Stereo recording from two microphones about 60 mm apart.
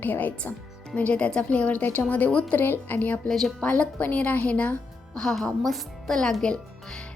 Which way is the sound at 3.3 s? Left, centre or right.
Centre.